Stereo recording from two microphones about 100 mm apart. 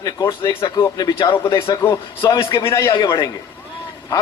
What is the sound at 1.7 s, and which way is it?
Speech, 25° left (ahead or behind).